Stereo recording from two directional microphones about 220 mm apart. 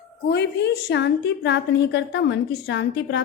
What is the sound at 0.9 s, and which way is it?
A woman's voice, 55° left (ahead or behind).